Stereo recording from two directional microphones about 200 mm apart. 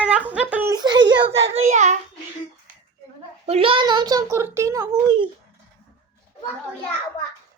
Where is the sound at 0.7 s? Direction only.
20° right (ahead or behind).